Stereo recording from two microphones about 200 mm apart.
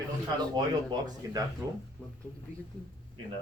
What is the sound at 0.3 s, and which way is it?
Speech, 20° right (ahead or behind).